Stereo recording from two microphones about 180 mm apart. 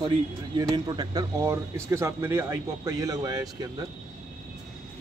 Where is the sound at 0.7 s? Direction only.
20° right (ahead or behind).